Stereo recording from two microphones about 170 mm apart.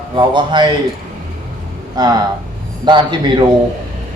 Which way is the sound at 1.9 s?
25° right (ahead or behind).